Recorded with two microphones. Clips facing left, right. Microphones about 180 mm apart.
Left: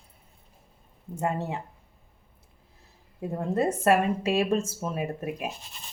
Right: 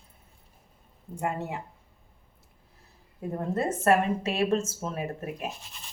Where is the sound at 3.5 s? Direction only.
15° left (ahead or behind).